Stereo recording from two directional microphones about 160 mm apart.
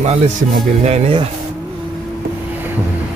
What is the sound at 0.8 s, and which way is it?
Speech, 40° right (ahead or behind).